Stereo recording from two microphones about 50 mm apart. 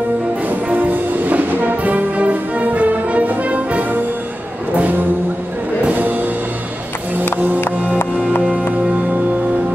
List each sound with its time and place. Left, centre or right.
0.5 s music: right